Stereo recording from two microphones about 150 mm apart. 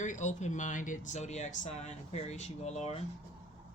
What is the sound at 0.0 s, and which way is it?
Speech, 55° left (ahead or behind).